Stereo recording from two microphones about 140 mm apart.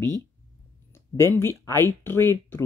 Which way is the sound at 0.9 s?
20° left (ahead or behind).